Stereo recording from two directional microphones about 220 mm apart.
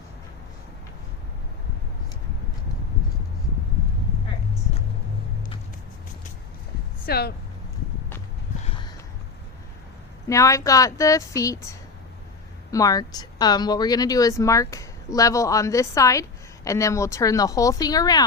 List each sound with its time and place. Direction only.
7.0 s speech: 45° left (ahead or behind)
10.2 s speech: 15° left (ahead or behind)
12.7 s speech: 15° left (ahead or behind)